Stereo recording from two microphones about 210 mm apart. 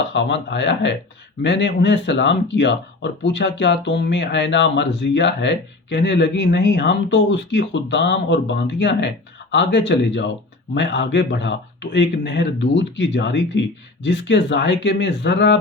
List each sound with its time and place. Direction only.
0.1 s speech: 55° left (ahead or behind)